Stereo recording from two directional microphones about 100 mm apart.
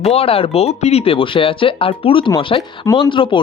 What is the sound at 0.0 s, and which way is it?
Speech, 85° left.